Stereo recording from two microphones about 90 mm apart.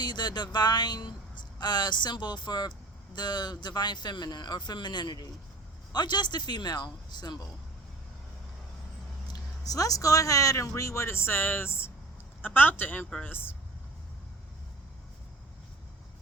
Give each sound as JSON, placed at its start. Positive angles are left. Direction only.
{"t": 0.0, "sound": "speech", "side_deg": 55}
{"t": 9.2, "sound": "speech", "side_deg": 45}